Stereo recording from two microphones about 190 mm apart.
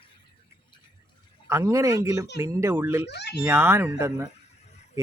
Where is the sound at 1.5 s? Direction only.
15° right (ahead or behind).